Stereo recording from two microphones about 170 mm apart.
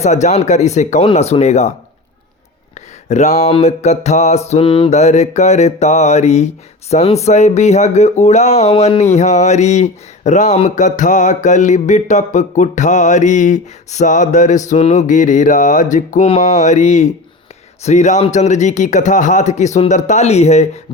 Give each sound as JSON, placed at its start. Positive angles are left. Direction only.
{"t": 0.0, "sound": "mantra", "side_deg": 40}
{"t": 3.1, "sound": "mantra", "side_deg": 40}
{"t": 6.9, "sound": "a sound", "side_deg": 40}